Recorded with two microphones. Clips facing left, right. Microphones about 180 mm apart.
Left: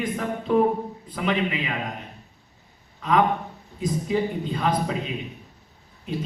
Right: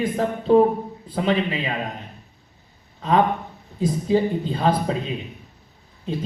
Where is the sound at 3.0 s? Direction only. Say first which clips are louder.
Right 2 dB; 30° right (ahead or behind).